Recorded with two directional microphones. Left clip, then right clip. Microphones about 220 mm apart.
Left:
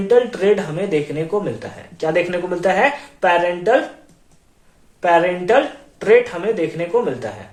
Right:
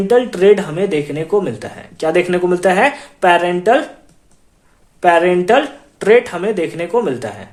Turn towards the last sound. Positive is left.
turn(degrees=-55)  # may be behind; listen again after turning